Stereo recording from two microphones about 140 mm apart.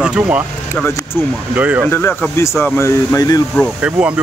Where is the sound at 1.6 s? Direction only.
10° right (ahead or behind).